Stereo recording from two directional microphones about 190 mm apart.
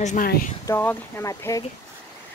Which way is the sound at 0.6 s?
10° left (ahead or behind).